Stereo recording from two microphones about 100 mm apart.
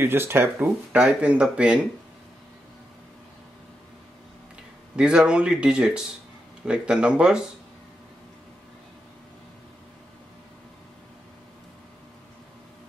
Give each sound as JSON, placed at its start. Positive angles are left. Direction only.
{"t": 0.0, "sound": "speech", "side_deg": -20}
{"t": 4.9, "sound": "speech", "side_deg": -10}